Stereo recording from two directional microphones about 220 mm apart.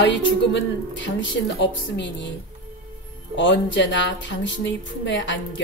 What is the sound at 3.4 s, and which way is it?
A woman's voice, 55° left (ahead or behind).